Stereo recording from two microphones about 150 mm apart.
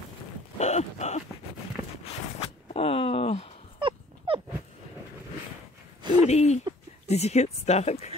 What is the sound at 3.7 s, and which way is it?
Dog, 35° right (ahead or behind).